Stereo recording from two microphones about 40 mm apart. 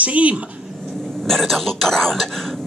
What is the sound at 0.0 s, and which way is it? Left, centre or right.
Speech, right.